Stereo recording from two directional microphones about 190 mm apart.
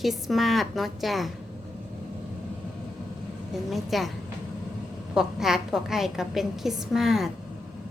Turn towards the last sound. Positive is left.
turn(degrees=0)  # may be behind; listen again after turning